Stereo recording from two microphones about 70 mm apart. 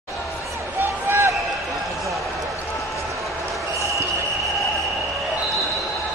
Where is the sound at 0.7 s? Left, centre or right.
Right.